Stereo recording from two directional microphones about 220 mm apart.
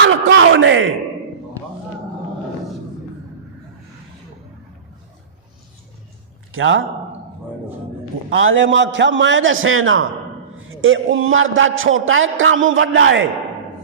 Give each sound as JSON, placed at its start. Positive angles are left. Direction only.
{"t": 0.0, "sound": "a man's voice", "side_deg": -60}
{"t": 6.5, "sound": "a man's voice", "side_deg": -65}
{"t": 8.3, "sound": "a man's voice", "side_deg": -60}